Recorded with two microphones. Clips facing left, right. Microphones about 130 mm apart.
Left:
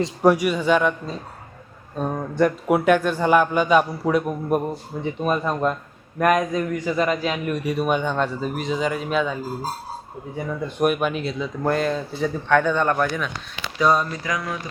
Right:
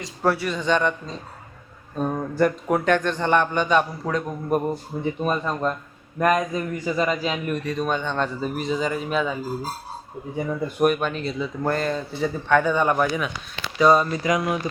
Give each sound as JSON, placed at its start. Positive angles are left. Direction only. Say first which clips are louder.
{"t": 0.2, "sound": "a man's voice", "louder": "left 4 dB", "side_deg": 15}
{"t": 7.6, "sound": "speech", "louder": "left 3 dB", "side_deg": 10}
{"t": 10.8, "sound": "speech", "louder": "left 1 dB", "side_deg": 5}
{"t": 14.3, "sound": "speech", "louder": "right 5 dB", "side_deg": -20}